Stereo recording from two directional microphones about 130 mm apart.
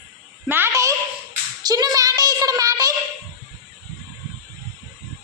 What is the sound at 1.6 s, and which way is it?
Child singing, 30° right (ahead or behind).